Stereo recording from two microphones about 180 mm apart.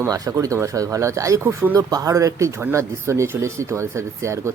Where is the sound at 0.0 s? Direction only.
15° right (ahead or behind).